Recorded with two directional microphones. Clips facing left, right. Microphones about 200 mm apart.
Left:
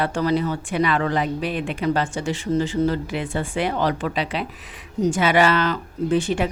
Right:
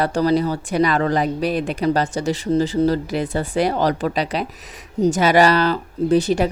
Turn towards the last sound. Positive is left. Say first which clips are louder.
# right 4 dB
turn(degrees=-40)  # may be behind; listen again after turning